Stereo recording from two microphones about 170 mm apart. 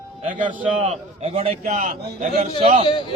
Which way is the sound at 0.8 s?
40° right (ahead or behind).